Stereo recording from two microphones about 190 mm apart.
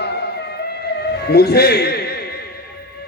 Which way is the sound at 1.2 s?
55° left (ahead or behind).